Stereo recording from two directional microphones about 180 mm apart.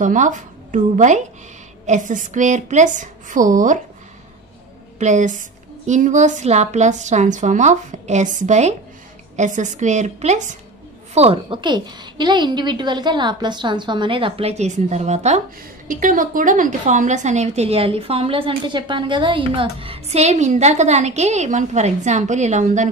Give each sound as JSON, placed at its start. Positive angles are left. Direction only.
{"t": 0.0, "sound": "a woman's voice", "side_deg": -45}
{"t": 4.9, "sound": "a woman's voice", "side_deg": -40}
{"t": 11.1, "sound": "a woman's voice", "side_deg": -30}